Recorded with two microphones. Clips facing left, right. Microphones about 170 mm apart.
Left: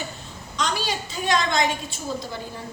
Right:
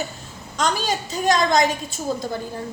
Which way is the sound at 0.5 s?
45° right (ahead or behind).